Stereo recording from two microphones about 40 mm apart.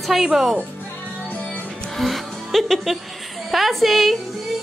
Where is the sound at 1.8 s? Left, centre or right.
Centre.